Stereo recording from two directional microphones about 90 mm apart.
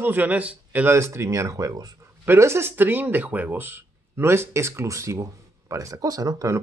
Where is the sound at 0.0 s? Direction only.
20° right (ahead or behind).